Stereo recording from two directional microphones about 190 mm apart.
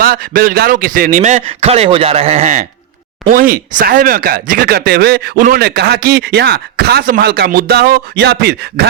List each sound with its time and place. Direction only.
0.0 s a man's voice: 50° right (ahead or behind)
3.2 s speech: 50° right (ahead or behind)